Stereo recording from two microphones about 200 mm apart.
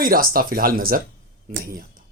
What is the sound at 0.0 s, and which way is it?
Speech, 45° right (ahead or behind).